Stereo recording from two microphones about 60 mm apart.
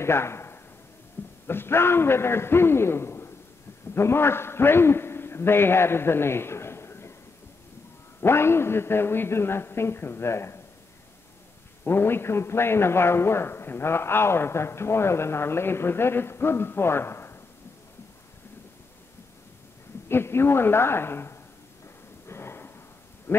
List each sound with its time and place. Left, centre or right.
0.0 s a man's voice: left
1.2 s a sound: left
1.5 s a man's voice: left
8.2 s a man's voice: left
11.8 s a man's voice: left
20.1 s a man's voice: left
22.3 s a sound: left